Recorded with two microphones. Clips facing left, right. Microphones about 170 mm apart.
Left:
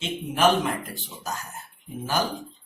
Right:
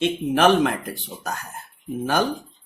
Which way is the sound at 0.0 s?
70° right (ahead or behind).